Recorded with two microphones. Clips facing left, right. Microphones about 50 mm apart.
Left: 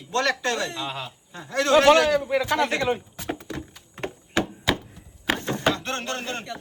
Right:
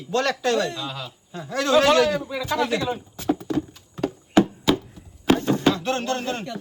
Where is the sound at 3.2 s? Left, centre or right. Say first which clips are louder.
Right 8 dB; left.